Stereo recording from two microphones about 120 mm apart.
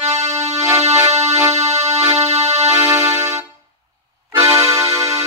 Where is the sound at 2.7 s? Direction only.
25° right (ahead or behind).